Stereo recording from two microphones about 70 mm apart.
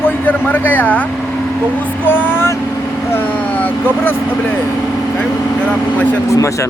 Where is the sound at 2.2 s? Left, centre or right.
Left.